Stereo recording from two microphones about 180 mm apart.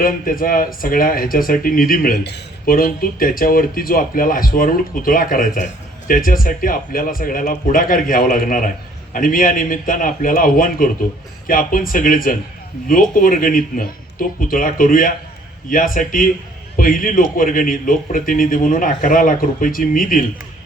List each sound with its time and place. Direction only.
0.0 s speech: 50° left (ahead or behind)